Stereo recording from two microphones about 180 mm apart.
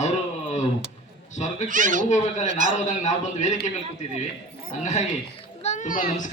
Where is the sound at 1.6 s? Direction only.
45° right (ahead or behind).